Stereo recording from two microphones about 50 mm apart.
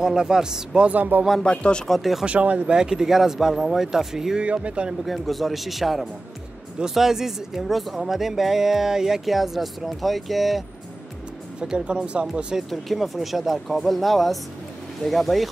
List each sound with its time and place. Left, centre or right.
0.0 s speech: centre
0.8 s speech: right
1.4 s speech: left
1.9 s speech: centre
2.2 s speech: right; by 4.5 s centre
4.5 s speech: right
5.0 s speech: centre
11.6 s speech: centre
12.6 s speech: centre